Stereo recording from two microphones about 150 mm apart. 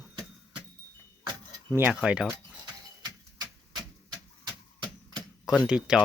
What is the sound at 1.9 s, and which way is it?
Speech, 5° right (ahead or behind).